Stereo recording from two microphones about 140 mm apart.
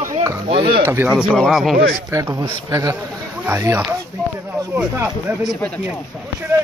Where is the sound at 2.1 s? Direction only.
20° right (ahead or behind).